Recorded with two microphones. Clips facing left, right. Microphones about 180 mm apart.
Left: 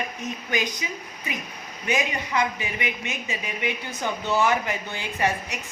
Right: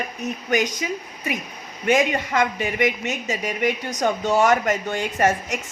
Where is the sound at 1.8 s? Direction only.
55° right (ahead or behind).